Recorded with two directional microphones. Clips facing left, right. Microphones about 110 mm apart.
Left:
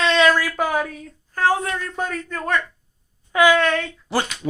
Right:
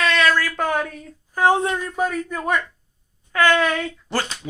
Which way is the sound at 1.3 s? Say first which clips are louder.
Right 2 dB; 15° right (ahead or behind).